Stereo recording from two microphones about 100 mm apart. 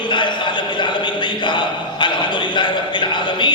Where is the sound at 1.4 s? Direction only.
50° left (ahead or behind).